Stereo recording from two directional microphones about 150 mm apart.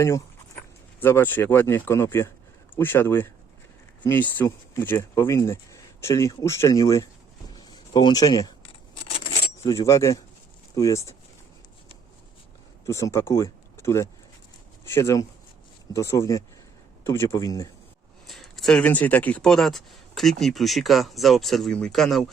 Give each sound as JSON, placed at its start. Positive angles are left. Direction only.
{"t": 0.9, "sound": "speech", "side_deg": 15}
{"t": 7.5, "sound": "a sound", "side_deg": 25}
{"t": 9.6, "sound": "speech", "side_deg": 20}
{"t": 12.8, "sound": "speech", "side_deg": 20}
{"t": 18.3, "sound": "speech", "side_deg": 0}